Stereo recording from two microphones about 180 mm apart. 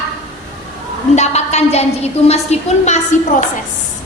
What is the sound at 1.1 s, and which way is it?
A woman's voice, 40° left (ahead or behind).